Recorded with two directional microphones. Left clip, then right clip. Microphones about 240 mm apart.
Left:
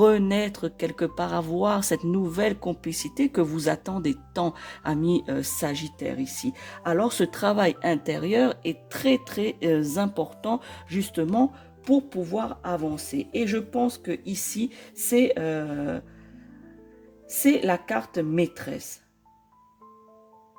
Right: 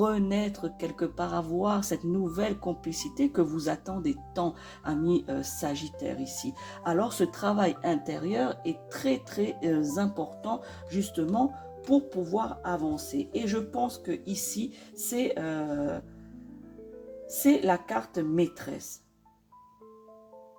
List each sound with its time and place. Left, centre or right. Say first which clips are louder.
0.0 s speech: left 8 dB; left
17.4 s speech: left 2 dB; left